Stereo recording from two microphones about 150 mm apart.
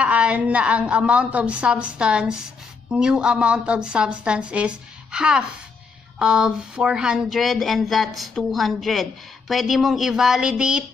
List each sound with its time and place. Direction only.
0.0 s a woman's voice: 10° right (ahead or behind)